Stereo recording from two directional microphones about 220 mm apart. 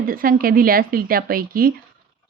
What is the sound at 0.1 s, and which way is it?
A woman's voice, 40° right (ahead or behind).